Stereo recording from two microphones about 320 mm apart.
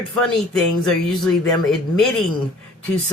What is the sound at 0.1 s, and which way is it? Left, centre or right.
Speech, centre.